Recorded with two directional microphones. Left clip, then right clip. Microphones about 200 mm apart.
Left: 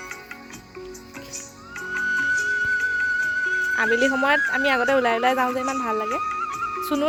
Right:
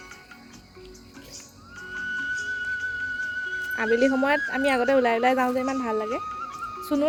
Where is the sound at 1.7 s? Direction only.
35° left (ahead or behind).